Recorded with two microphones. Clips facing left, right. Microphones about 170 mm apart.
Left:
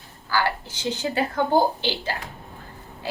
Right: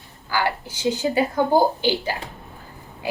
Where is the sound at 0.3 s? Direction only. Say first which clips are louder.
Right 1 dB; 15° right (ahead or behind).